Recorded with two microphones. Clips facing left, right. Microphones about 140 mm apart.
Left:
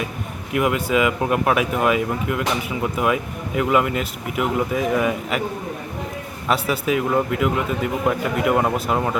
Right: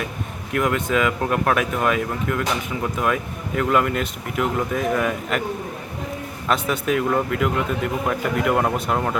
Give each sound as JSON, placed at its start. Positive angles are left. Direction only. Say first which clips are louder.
{"t": 0.5, "sound": "speech", "louder": "left 1 dB", "side_deg": 5}
{"t": 6.5, "sound": "speech", "louder": "left 1 dB", "side_deg": 5}